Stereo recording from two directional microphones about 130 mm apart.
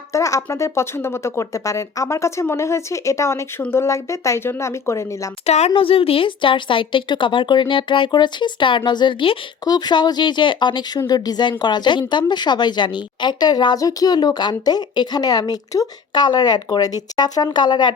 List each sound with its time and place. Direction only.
0.1 s speech: 25° left (ahead or behind)
5.5 s a woman's voice: 55° left (ahead or behind); by 17.9 s 35° left (ahead or behind)